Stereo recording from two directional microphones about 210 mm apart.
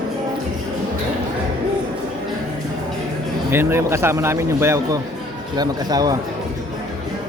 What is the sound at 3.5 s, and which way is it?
A man's voice, 10° right (ahead or behind).